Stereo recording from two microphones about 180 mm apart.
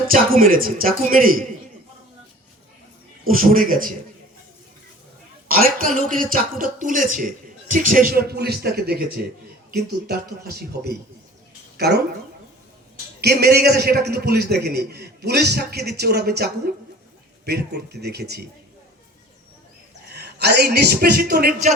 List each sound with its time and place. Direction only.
0.1 s speech: 50° right (ahead or behind)
3.2 s speech: 50° right (ahead or behind)
5.5 s a woman's voice: 55° right (ahead or behind)
13.2 s a man's voice: 60° right (ahead or behind)
20.1 s a woman's voice: 65° right (ahead or behind)